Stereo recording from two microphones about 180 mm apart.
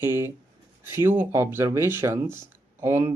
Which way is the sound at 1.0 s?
10° right (ahead or behind).